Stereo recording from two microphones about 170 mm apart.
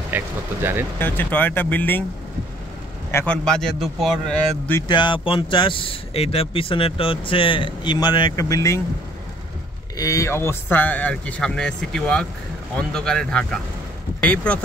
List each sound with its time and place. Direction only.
0.1 s speech: 10° right (ahead or behind)
0.9 s speech: 10° left (ahead or behind)
3.1 s a man's voice: 15° left (ahead or behind)
3.4 s a man's voice: centre (ahead or behind)
4.8 s speech: 25° left (ahead or behind)
9.9 s a man's voice: 20° left (ahead or behind)